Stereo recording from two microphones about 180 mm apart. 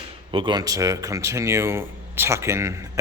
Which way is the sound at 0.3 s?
25° right (ahead or behind).